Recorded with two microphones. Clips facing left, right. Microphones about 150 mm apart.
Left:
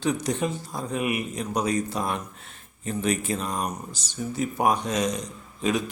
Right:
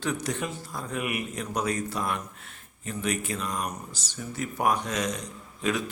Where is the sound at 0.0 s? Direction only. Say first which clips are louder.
Left 5 dB; 15° left (ahead or behind).